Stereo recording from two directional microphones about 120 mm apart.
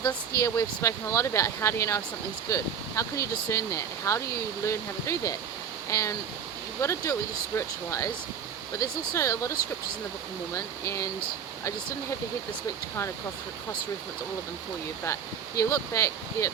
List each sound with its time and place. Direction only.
0.0 s speech: 30° left (ahead or behind)
15.0 s speech: 25° left (ahead or behind)